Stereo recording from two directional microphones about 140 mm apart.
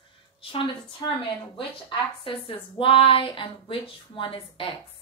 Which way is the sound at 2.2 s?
40° left (ahead or behind).